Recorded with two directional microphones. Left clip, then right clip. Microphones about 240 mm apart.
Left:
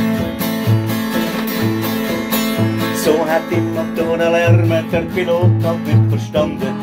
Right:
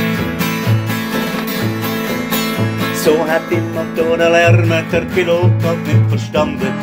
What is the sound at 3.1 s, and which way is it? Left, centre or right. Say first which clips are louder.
Music: right 2 dB; centre.